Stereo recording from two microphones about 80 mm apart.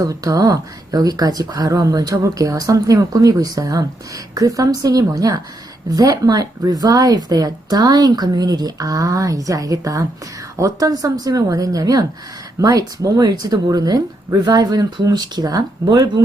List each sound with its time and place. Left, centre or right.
0.0 s speech: right